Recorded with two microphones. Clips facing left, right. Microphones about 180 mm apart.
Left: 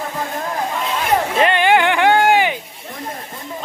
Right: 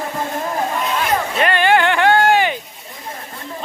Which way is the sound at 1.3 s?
20° left (ahead or behind).